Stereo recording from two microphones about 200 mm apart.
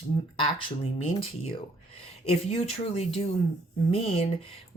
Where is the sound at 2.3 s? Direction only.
30° left (ahead or behind).